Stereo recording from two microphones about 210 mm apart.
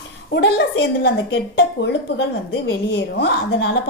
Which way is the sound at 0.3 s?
55° left (ahead or behind).